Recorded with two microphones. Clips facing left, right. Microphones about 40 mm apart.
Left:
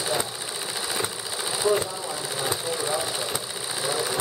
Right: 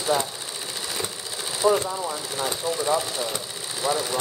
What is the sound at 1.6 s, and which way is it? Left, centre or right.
Speech, right.